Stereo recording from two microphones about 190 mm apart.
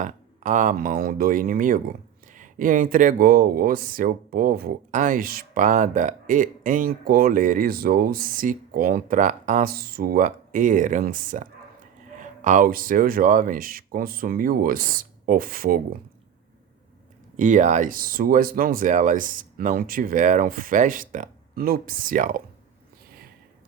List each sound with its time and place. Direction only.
0.0 s speech: 40° right (ahead or behind)
17.3 s speech: 40° right (ahead or behind)